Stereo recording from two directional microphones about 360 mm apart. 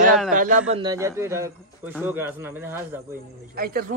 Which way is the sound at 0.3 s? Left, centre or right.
Right.